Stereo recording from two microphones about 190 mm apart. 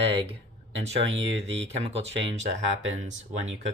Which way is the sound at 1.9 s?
35° right (ahead or behind).